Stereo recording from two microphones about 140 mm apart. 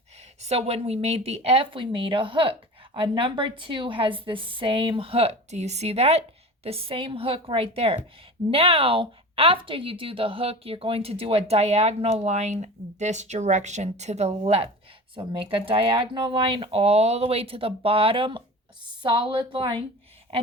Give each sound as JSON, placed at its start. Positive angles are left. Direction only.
{"t": 0.4, "sound": "a woman's voice", "side_deg": -50}